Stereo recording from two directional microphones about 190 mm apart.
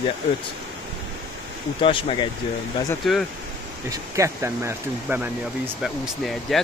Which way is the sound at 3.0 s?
Centre (ahead or behind).